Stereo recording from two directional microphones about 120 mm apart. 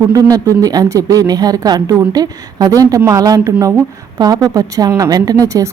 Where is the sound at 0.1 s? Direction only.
30° right (ahead or behind).